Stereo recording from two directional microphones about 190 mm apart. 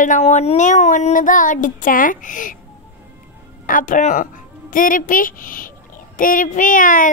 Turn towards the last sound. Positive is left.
turn(degrees=45)  # may be behind; listen again after turning